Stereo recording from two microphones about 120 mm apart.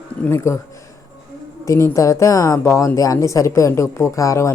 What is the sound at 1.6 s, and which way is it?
A woman's voice, 25° left (ahead or behind).